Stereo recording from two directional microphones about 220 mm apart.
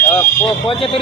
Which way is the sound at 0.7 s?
25° left (ahead or behind).